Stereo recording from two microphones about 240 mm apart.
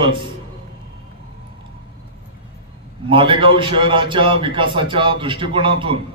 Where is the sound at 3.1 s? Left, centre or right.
Right.